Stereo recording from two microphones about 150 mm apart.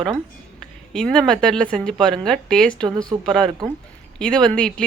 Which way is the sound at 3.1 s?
35° right (ahead or behind).